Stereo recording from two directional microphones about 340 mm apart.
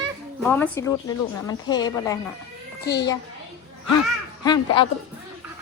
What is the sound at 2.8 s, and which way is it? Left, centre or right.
Speech, left.